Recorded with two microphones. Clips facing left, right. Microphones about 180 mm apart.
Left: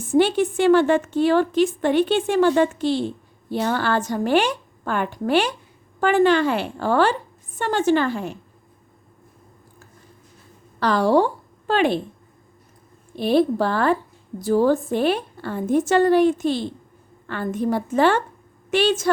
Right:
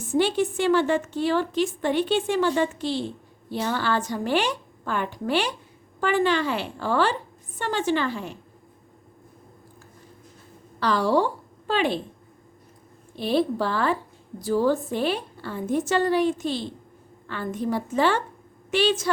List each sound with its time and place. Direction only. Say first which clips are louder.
0.1 s a woman's voice: left 4 dB; 55° left (ahead or behind)
10.8 s a woman's voice: left 4 dB; 50° left (ahead or behind)
13.1 s a woman's voice: left 5 dB; 50° left (ahead or behind)